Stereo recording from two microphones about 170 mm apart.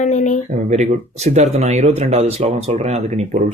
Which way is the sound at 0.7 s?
40° right (ahead or behind).